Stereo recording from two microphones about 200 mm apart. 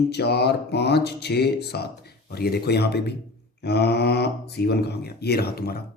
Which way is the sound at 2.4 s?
50° left (ahead or behind).